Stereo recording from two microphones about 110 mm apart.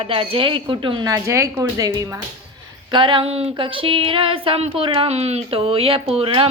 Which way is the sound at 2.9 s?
50° right (ahead or behind).